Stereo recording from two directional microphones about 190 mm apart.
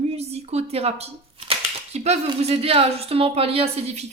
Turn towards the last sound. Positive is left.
turn(degrees=-35)  # may be behind; listen again after turning